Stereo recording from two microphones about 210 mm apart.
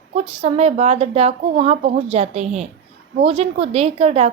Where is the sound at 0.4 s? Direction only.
30° right (ahead or behind).